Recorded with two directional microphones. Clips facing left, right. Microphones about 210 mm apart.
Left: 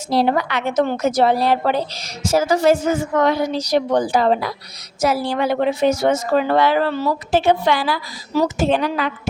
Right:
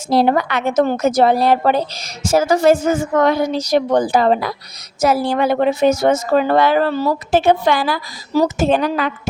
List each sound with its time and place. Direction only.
0.1 s a woman's voice: 50° right (ahead or behind)